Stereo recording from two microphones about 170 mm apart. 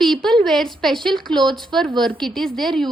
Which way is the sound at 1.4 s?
25° right (ahead or behind).